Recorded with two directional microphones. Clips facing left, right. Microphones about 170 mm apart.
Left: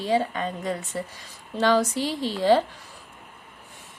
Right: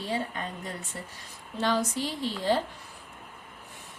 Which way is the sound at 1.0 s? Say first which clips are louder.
Left 9 dB; 80° left.